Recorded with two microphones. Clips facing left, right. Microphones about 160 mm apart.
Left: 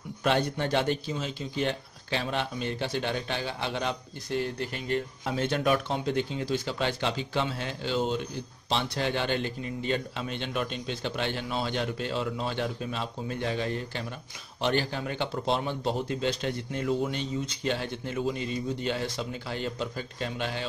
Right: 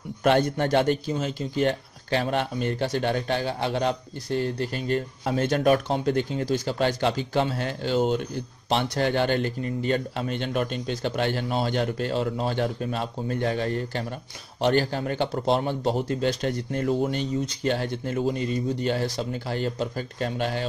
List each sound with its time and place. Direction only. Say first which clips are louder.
0.2 s a man's voice: right 5 dB; 50° right (ahead or behind)